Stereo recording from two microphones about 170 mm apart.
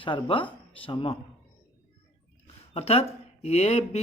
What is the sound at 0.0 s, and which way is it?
Speech, 30° left (ahead or behind).